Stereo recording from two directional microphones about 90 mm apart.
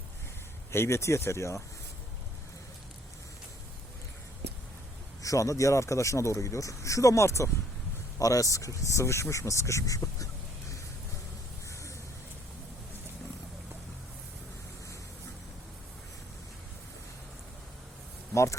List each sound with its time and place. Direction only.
0.7 s speech: 30° left (ahead or behind)
5.2 s speech: 35° left (ahead or behind)